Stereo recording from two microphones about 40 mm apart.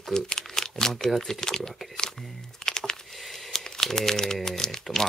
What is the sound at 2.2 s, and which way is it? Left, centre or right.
Typing, centre.